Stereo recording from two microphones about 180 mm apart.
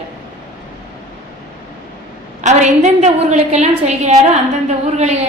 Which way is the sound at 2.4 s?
40° right (ahead or behind).